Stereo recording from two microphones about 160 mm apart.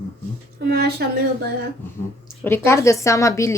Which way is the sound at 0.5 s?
75° right (ahead or behind).